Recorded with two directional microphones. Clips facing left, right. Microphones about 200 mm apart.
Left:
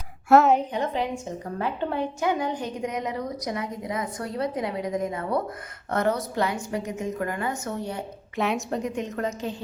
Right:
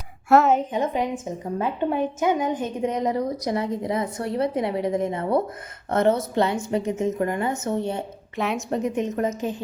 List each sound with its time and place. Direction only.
0.3 s a woman's voice: centre (ahead or behind)
0.7 s a woman's voice: 20° right (ahead or behind)
8.4 s a woman's voice: centre (ahead or behind)
8.7 s a woman's voice: 20° right (ahead or behind)